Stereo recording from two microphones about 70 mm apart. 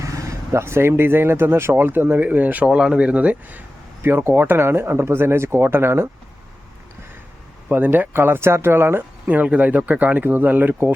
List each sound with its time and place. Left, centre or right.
0.0 s speech: right
4.0 s speech: right
7.7 s speech: right
9.2 s speech: right